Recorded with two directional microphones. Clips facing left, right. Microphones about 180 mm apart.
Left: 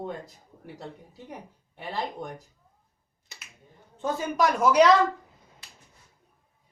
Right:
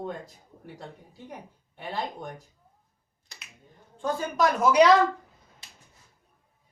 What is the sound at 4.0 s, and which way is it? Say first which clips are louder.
Speech: even; 5° left (ahead or behind).